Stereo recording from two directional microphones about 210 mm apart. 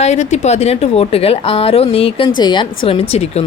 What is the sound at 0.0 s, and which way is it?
Speech, 30° left (ahead or behind).